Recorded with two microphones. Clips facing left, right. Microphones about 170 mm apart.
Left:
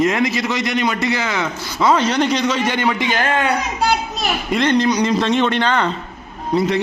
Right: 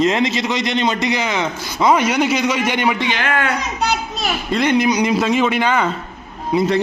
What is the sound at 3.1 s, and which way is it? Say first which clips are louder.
Speech: left 2 dB; 45° left (ahead or behind).